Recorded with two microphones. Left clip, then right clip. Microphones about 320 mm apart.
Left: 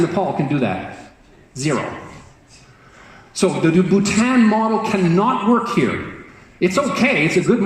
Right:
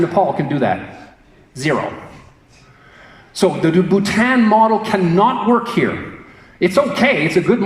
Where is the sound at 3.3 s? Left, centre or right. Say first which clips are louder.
Right 2 dB; right.